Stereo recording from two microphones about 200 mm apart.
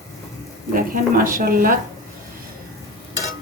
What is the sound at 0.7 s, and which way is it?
A woman's voice, 45° right (ahead or behind).